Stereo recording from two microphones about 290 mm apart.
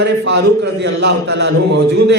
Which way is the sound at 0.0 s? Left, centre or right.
Right.